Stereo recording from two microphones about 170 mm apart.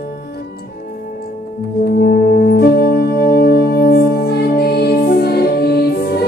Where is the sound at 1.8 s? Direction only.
65° left (ahead or behind).